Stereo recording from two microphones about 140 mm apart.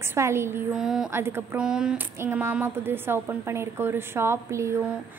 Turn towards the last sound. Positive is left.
turn(degrees=-20)  # may be behind; listen again after turning